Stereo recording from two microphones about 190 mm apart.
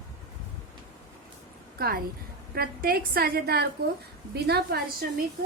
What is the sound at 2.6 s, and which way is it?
A woman's voice, 55° right (ahead or behind).